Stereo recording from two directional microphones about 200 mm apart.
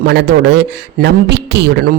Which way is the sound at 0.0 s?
60° right (ahead or behind).